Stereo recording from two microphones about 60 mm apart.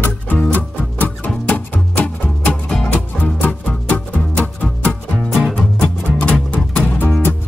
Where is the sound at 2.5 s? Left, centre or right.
Centre.